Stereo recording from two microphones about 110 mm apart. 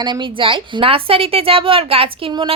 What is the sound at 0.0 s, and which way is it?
A woman's voice, 45° right (ahead or behind).